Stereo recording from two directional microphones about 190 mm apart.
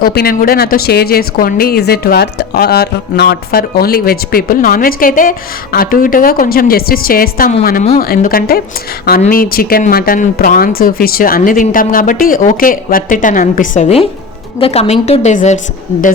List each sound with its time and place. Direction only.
0.0 s a woman's voice: 55° left (ahead or behind)